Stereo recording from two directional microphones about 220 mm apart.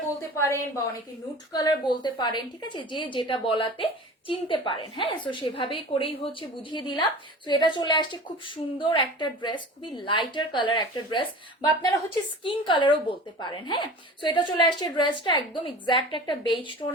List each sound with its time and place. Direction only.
0.3 s a woman's voice: 15° left (ahead or behind)